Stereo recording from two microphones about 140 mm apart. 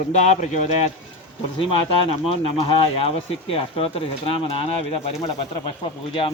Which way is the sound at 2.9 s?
45° left (ahead or behind).